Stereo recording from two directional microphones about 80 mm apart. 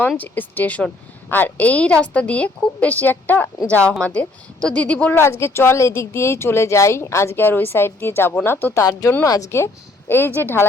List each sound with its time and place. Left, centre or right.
0.2 s a woman's voice: left
5.2 s a woman's voice: left
8.8 s speech: left
10.1 s a woman's voice: left